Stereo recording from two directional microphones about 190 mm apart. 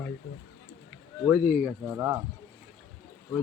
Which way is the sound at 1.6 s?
15° right (ahead or behind).